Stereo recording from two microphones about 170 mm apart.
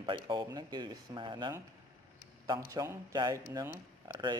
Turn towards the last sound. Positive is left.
turn(degrees=-20)  # may be behind; listen again after turning